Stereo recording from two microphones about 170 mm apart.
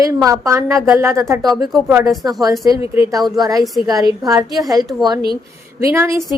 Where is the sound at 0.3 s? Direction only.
15° right (ahead or behind).